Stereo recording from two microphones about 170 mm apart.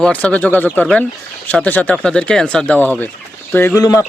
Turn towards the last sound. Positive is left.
turn(degrees=20)  # may be behind; listen again after turning